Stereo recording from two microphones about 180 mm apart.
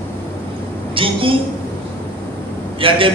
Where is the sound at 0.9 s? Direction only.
30° right (ahead or behind).